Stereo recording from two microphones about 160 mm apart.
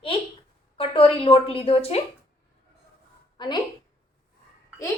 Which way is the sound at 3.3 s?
25° left (ahead or behind).